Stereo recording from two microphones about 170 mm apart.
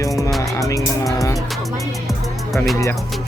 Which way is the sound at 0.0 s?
20° left (ahead or behind).